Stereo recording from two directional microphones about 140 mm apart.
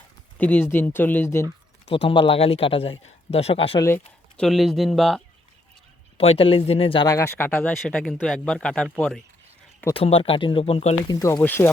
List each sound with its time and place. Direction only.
0.3 s speech: 10° left (ahead or behind)
1.9 s a man's voice: 40° left (ahead or behind)
3.8 s speech: 20° left (ahead or behind)
4.4 s speech: centre (ahead or behind)
6.1 s a man's voice: 45° left (ahead or behind)
7.1 s speech: 20° left (ahead or behind)
9.9 s a man's voice: 40° left (ahead or behind)
11.1 s speech: 25° left (ahead or behind)